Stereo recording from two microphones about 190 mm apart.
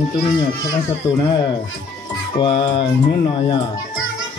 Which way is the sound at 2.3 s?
25° left (ahead or behind).